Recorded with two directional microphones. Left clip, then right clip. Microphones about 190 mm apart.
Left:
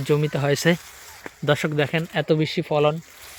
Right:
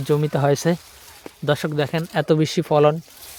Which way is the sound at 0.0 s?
10° right (ahead or behind).